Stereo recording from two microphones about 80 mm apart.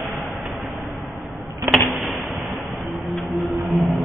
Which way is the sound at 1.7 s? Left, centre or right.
Right.